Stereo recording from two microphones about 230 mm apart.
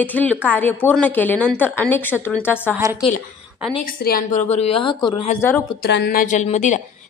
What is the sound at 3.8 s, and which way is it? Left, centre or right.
Speech, left.